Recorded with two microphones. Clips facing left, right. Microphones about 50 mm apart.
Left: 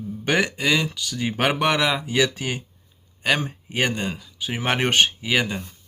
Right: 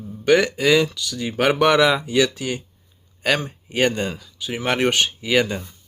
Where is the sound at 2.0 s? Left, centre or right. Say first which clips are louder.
Right 2 dB; left.